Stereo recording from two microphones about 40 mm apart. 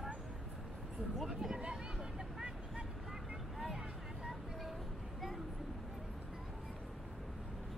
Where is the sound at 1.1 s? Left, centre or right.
Centre.